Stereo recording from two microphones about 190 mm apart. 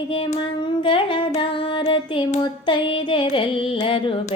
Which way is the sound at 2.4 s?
25° left (ahead or behind).